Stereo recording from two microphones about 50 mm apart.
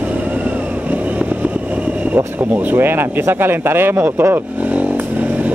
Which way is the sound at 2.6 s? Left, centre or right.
Right.